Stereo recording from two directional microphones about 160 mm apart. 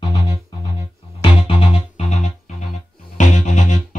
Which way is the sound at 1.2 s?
35° left (ahead or behind).